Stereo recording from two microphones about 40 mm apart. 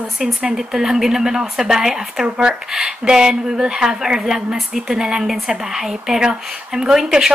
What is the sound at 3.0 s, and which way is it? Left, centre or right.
Speech, centre.